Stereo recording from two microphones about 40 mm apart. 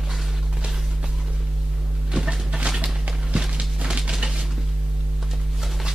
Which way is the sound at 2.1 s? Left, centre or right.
Centre.